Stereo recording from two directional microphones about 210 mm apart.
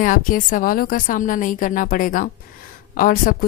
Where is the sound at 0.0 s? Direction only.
40° left (ahead or behind).